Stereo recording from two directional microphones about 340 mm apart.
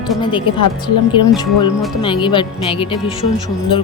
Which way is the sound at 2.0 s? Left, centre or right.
Centre.